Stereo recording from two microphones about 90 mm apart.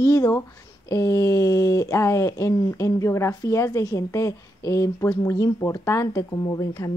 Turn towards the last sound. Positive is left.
turn(degrees=45)  # may be behind; listen again after turning